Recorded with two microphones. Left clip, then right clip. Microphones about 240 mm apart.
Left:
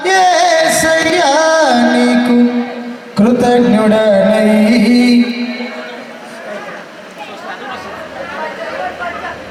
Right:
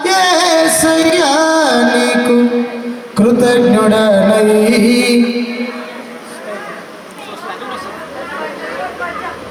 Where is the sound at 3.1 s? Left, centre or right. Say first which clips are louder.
Even; right.